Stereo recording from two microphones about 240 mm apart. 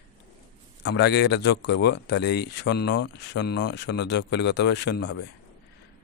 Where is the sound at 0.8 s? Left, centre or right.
Left.